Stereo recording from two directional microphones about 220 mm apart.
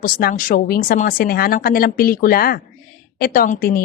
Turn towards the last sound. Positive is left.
turn(degrees=40)  # may be behind; listen again after turning